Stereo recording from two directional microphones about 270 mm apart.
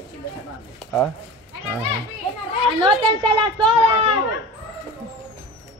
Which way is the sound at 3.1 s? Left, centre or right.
Centre.